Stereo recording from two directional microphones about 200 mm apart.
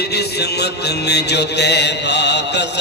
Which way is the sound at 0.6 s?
55° left (ahead or behind).